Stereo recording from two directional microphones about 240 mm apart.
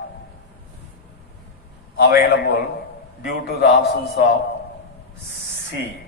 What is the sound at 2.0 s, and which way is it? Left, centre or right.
Speech, left.